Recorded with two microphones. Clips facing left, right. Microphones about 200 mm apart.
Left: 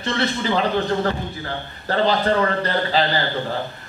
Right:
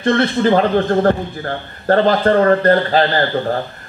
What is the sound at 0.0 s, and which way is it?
Speech, 50° right (ahead or behind).